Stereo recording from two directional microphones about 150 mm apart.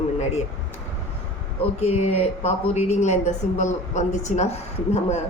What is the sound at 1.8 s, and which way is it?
A woman's voice, 45° left (ahead or behind).